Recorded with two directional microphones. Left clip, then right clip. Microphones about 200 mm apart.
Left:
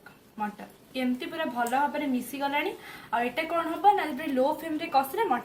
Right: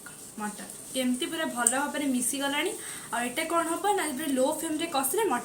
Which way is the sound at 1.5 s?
15° left (ahead or behind).